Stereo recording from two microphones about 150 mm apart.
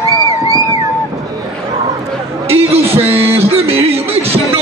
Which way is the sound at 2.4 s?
40° right (ahead or behind).